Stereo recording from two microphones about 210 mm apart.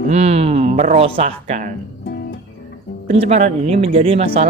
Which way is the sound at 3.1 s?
30° right (ahead or behind).